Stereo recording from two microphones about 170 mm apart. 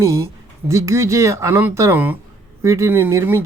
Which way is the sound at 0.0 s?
15° right (ahead or behind).